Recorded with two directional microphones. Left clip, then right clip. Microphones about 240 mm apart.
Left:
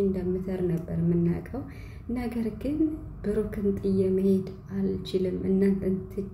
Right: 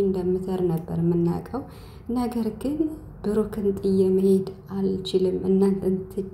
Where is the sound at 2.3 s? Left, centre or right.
Centre.